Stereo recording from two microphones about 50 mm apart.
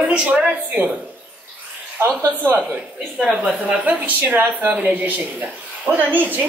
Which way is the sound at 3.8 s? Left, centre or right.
Right.